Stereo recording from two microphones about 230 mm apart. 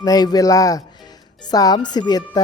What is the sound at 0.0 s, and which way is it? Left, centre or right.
Speech, centre.